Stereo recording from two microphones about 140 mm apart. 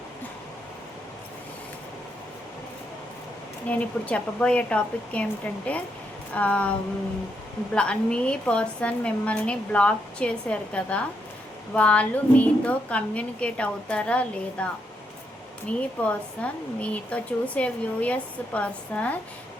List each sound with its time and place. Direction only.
3.7 s a woman's voice: 10° left (ahead or behind)